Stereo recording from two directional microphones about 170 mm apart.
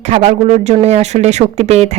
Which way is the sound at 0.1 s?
45° right (ahead or behind).